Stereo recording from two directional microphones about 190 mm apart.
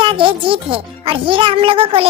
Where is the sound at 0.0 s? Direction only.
25° right (ahead or behind).